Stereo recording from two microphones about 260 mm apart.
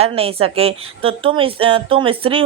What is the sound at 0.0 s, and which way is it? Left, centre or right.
Speech, right.